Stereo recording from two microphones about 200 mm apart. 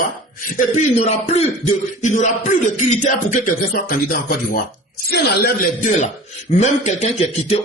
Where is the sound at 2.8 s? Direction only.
35° left (ahead or behind).